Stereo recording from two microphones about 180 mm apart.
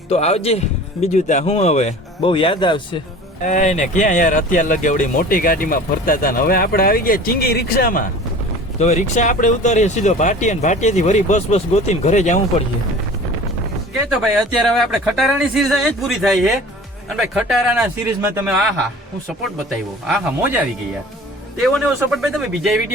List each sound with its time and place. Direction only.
0.1 s speech: 35° left (ahead or behind)
3.4 s speech: 45° left (ahead or behind)
8.8 s speech: 40° left (ahead or behind)
14.1 s speech: centre (ahead or behind)
18.2 s a man's voice: 15° right (ahead or behind)
20.1 s speech: 5° right (ahead or behind)
22.1 s speech: centre (ahead or behind)